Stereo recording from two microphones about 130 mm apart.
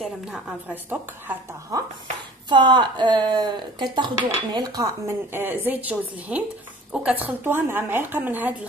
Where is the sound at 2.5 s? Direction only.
35° right (ahead or behind); by 7.2 s 5° right (ahead or behind).